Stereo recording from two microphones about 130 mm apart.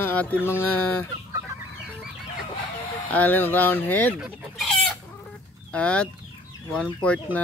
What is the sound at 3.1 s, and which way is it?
Speech, 15° left (ahead or behind).